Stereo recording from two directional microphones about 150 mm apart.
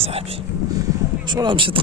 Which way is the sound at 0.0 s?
40° right (ahead or behind).